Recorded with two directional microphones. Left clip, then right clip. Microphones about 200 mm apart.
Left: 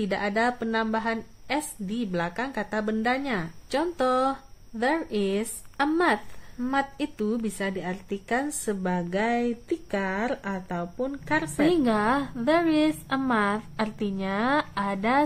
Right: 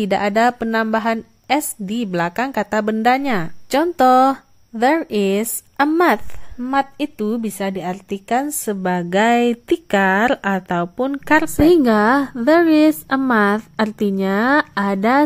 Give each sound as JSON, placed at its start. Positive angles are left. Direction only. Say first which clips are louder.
{"t": 0.0, "sound": "a woman's voice", "louder": "right 10 dB", "side_deg": -45}